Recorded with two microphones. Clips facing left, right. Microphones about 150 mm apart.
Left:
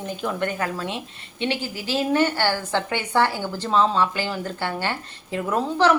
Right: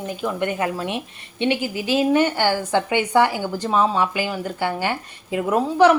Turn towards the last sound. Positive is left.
turn(degrees=-10)  # may be behind; listen again after turning